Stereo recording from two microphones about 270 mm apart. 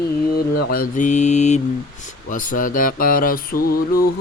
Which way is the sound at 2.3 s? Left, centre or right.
Left.